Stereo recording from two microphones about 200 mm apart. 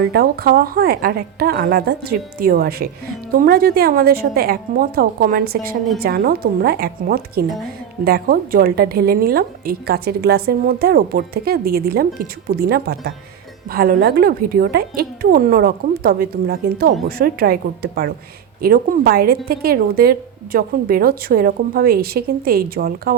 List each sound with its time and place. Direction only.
0.1 s a woman's voice: 50° right (ahead or behind)